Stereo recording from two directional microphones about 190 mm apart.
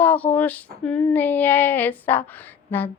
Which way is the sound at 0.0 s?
10° left (ahead or behind).